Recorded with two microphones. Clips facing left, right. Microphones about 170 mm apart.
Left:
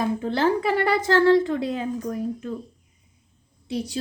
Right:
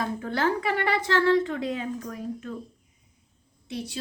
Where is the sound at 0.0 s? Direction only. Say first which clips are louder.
Left 5 dB; 25° left (ahead or behind).